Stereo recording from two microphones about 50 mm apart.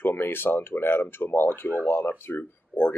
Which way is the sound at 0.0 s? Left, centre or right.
Left.